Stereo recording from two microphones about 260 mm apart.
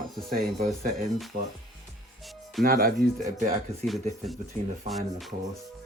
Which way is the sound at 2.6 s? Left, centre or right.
Right.